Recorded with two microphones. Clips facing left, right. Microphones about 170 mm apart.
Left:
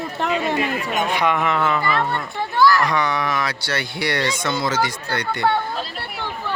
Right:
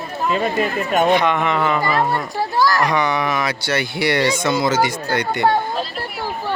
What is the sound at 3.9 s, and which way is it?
Speech, 5° right (ahead or behind).